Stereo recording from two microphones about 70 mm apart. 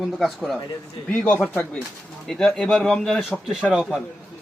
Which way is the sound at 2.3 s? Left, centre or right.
Centre.